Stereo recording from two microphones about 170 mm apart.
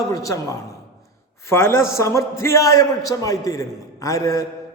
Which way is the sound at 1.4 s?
15° left (ahead or behind).